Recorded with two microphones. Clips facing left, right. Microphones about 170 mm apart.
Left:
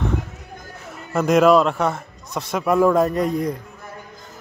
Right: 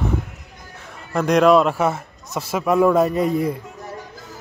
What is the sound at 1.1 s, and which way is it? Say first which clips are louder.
A man's voice: even; centre (ahead or behind).